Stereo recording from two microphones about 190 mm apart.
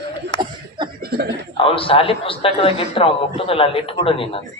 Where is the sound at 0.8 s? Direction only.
25° right (ahead or behind).